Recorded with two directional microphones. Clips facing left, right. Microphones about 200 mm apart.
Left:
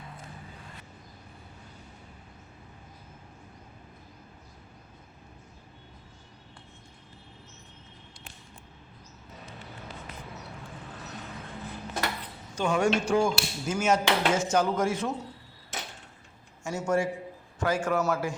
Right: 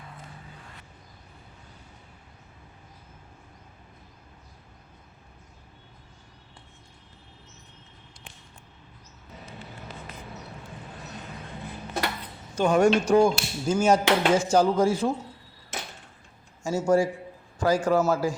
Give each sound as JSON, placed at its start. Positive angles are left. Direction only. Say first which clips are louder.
{"t": 12.5, "sound": "speech", "louder": "right 5 dB", "side_deg": -40}
{"t": 16.6, "sound": "speech", "louder": "right 5 dB", "side_deg": -30}